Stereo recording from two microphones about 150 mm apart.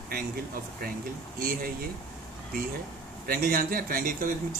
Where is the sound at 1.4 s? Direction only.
75° right (ahead or behind).